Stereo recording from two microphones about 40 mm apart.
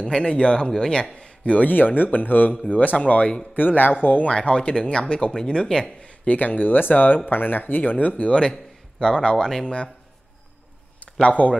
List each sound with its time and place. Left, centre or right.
0.0 s speech: left
1.2 s a sound: left
1.7 s speech: left
3.0 s speech: left
3.5 s speech: left
4.3 s speech: left
5.9 s a sound: left
6.3 s speech: left
9.0 s speech: left
11.2 s speech: left